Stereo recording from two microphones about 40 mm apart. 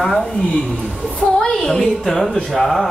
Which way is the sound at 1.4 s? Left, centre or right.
Centre.